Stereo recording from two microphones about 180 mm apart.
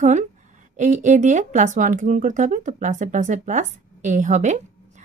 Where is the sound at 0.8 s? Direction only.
40° right (ahead or behind).